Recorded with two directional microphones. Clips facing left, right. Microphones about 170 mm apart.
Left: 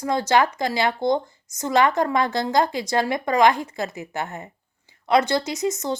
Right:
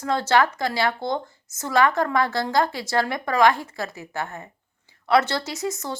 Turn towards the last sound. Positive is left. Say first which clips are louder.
# left 4 dB
turn(degrees=20)  # may be behind; listen again after turning